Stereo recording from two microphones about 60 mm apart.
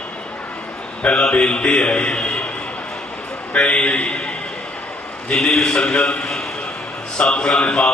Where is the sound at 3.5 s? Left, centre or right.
Left.